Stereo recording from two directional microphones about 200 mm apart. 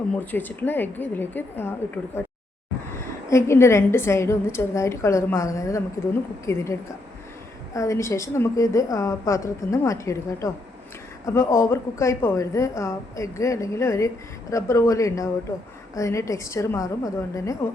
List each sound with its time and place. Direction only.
0.1 s a woman's voice: 10° left (ahead or behind)